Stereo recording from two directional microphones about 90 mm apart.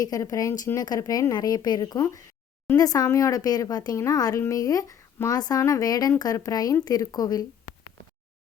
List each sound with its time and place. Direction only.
0.0 s speech: 40° left (ahead or behind)